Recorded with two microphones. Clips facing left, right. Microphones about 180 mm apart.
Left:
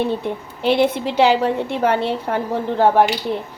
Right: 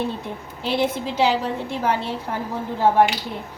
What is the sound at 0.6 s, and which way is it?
A woman's voice, 65° left (ahead or behind).